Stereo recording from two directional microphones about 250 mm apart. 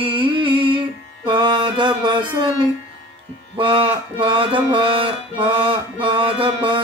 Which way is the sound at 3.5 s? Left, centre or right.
Centre.